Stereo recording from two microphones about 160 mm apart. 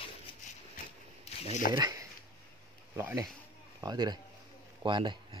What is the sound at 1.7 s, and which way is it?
Speech, 20° right (ahead or behind).